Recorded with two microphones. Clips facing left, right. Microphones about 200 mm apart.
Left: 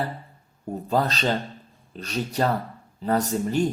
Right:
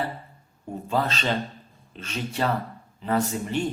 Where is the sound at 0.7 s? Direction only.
40° left (ahead or behind).